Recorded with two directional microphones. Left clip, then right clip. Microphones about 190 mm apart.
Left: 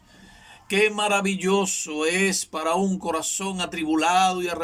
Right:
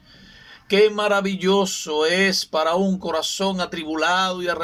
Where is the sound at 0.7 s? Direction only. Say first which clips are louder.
Right 4 dB; 10° left (ahead or behind).